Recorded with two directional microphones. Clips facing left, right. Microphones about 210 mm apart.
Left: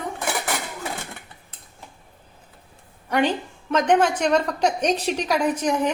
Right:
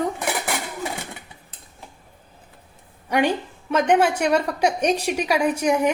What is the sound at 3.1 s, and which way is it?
A woman's voice, 10° right (ahead or behind).